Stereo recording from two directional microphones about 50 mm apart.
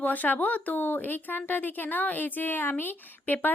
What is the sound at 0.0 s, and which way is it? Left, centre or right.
Speech, left.